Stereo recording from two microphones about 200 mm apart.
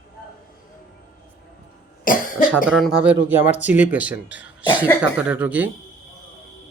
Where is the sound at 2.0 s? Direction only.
45° left (ahead or behind).